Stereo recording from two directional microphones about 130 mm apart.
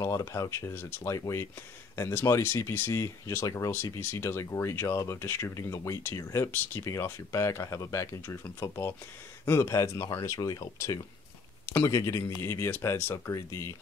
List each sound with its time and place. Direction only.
0.0 s speech: 20° left (ahead or behind)